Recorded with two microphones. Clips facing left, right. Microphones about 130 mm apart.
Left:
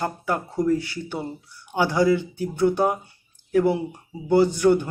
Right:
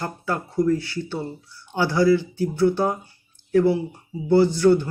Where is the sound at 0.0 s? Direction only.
20° left (ahead or behind).